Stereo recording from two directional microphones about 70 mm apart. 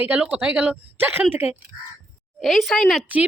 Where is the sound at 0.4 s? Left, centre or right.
Centre.